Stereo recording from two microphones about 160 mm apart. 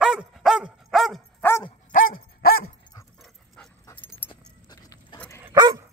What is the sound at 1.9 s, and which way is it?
Dog, 60° left (ahead or behind).